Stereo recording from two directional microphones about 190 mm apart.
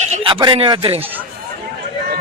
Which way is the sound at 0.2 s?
25° right (ahead or behind).